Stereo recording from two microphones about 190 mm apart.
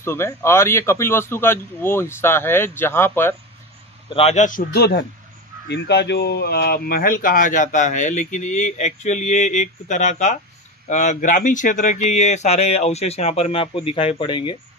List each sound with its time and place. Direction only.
0.0 s speech: 15° left (ahead or behind)
4.1 s a man's voice: 35° left (ahead or behind)